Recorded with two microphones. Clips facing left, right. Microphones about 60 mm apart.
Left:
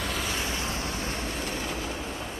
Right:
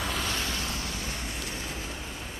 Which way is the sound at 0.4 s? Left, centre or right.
Left.